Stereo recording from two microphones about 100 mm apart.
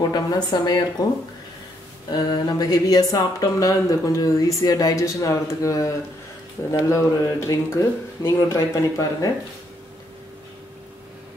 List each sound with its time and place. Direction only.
0.0 s a woman's voice: 40° left (ahead or behind)
2.0 s speech: 45° left (ahead or behind)